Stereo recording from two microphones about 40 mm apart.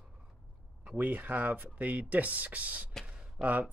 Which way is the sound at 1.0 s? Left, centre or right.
Right.